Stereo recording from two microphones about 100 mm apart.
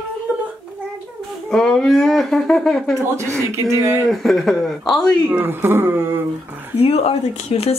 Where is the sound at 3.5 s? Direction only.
30° right (ahead or behind).